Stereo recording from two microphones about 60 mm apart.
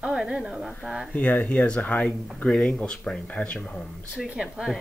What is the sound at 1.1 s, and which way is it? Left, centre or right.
Speech, left.